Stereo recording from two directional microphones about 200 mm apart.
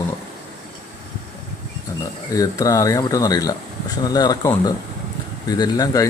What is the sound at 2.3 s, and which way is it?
Speech, 15° left (ahead or behind).